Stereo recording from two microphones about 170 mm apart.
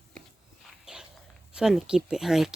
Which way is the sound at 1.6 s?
5° right (ahead or behind).